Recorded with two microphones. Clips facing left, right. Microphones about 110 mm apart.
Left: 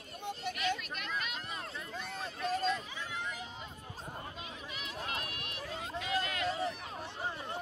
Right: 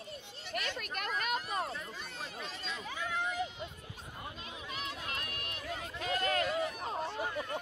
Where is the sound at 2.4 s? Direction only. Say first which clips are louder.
Left 15 dB; 45° left (ahead or behind).